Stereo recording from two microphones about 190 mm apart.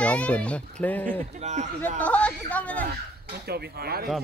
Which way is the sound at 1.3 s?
40° right (ahead or behind).